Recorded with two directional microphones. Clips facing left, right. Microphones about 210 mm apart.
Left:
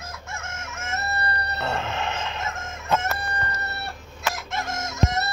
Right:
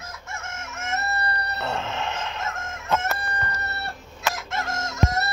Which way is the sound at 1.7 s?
15° left (ahead or behind).